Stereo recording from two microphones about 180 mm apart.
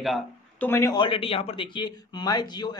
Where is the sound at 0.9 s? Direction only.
30° left (ahead or behind).